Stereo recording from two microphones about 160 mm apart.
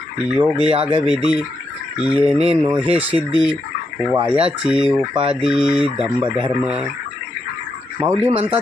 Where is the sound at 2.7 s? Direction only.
10° right (ahead or behind).